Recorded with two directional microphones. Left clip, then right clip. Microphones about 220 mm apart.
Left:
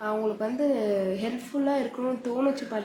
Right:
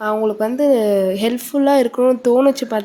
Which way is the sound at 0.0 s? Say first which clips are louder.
Right 10 dB; 45° right (ahead or behind).